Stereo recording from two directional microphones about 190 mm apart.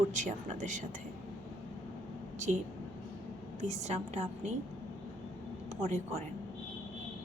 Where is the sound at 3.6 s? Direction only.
35° right (ahead or behind).